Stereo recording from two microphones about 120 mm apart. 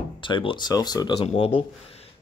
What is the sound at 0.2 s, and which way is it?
Speech, 45° left (ahead or behind).